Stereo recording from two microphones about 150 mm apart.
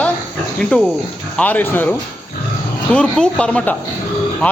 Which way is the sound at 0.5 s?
5° left (ahead or behind).